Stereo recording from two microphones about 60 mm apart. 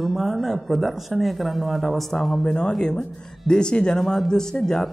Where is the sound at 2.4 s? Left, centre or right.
Centre.